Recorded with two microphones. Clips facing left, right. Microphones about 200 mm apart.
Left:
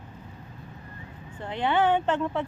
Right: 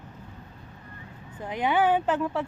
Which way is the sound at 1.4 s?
10° right (ahead or behind).